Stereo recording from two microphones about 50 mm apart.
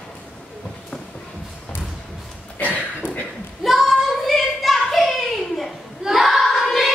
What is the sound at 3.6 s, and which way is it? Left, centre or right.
Child singing, centre.